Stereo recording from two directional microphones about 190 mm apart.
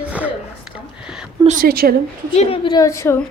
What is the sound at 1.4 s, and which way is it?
Speech, 45° right (ahead or behind).